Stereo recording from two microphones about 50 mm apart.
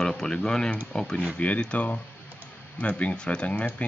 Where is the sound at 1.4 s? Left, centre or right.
Left.